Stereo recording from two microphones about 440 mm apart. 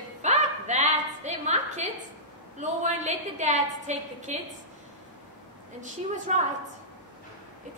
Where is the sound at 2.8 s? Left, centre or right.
Centre.